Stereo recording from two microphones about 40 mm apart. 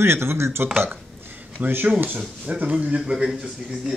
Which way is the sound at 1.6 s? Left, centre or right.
Right.